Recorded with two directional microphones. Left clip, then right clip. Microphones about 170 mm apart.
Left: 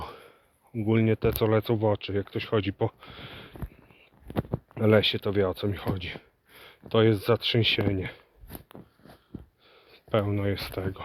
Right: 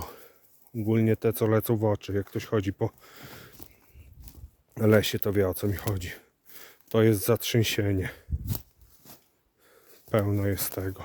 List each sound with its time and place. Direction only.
0.0 s speech: 35° right (ahead or behind); by 3.5 s 50° right (ahead or behind)
4.7 s speech: 50° right (ahead or behind)
9.7 s speech: 50° right (ahead or behind)